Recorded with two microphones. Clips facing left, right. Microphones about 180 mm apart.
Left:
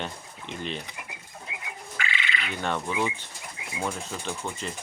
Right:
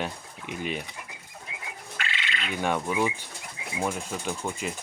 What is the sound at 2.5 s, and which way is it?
Speech, 10° right (ahead or behind).